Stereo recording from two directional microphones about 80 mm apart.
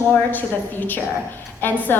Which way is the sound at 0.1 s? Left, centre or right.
Left.